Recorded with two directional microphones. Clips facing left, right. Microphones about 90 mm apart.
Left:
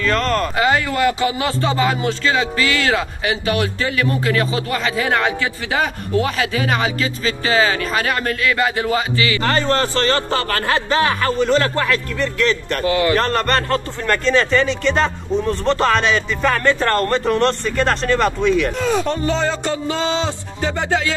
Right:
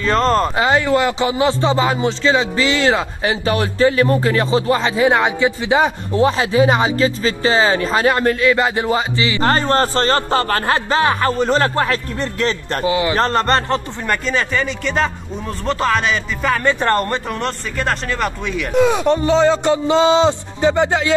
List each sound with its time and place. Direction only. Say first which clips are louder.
0.0 s speech: right 3 dB; 30° right (ahead or behind)
9.4 s a man's voice: right 4 dB; 35° right (ahead or behind)
12.8 s speech: even; 20° right (ahead or behind)
14.0 s a man's voice: left 6 dB; 10° right (ahead or behind)
16.6 s speech: right 2 dB; 15° right (ahead or behind)
17.3 s a man's voice: left 6 dB; 5° right (ahead or behind)
18.8 s speech: right 5 dB; 15° right (ahead or behind)